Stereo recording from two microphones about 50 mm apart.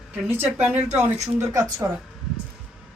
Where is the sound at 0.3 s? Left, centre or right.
Right.